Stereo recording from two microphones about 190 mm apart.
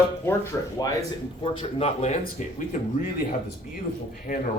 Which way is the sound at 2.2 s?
50° left (ahead or behind).